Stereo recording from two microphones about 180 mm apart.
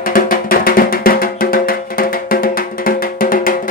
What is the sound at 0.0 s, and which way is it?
Music, 50° left (ahead or behind).